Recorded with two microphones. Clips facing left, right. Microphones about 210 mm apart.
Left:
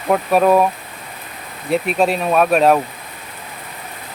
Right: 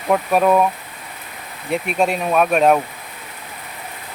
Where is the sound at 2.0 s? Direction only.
35° left (ahead or behind).